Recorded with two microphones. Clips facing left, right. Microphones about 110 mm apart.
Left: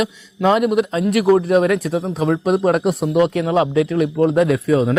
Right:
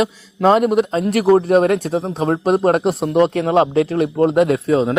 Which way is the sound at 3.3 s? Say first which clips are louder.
Right 2 dB; 35° right (ahead or behind).